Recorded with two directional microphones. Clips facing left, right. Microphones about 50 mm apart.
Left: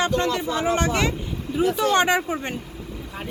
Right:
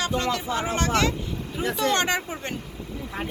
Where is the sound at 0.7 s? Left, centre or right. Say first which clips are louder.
Right 1 dB; centre.